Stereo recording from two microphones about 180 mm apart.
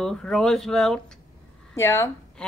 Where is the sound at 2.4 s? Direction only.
5° left (ahead or behind).